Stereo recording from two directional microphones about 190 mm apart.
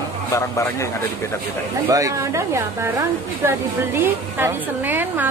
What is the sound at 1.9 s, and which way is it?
A woman's voice, 15° right (ahead or behind).